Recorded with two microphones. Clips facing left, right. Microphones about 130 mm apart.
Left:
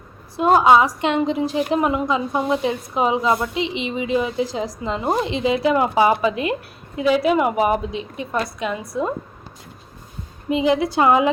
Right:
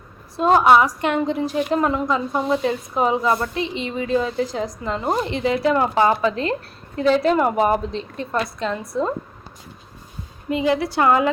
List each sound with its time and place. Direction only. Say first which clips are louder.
0.6 s a woman's voice: even; 15° left (ahead or behind)
10.5 s a woman's voice: left 2 dB; 20° left (ahead or behind)